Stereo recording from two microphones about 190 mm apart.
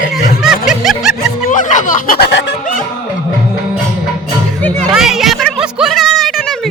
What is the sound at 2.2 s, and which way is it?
Music, 65° left (ahead or behind).